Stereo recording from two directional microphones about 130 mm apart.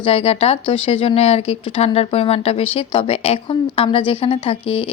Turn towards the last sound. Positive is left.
turn(degrees=45)  # may be behind; listen again after turning